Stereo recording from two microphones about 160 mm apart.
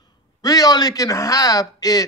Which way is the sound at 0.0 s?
25° left (ahead or behind).